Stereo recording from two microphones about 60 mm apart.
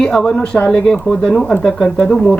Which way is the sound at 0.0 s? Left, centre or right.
Centre.